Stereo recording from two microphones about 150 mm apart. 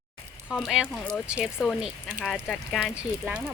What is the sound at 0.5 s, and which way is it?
Speech, centre (ahead or behind).